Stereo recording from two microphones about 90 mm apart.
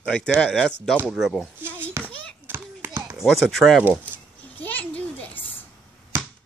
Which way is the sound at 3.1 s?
Centre (ahead or behind).